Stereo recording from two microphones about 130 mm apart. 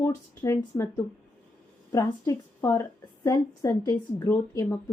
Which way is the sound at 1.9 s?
25° left (ahead or behind).